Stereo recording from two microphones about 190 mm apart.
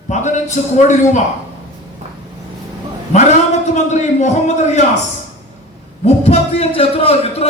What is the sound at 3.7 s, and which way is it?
Speech, 40° left (ahead or behind).